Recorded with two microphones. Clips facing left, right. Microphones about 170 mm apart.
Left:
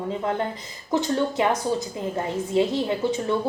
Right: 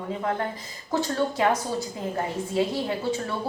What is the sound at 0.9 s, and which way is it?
A woman's voice, 20° left (ahead or behind).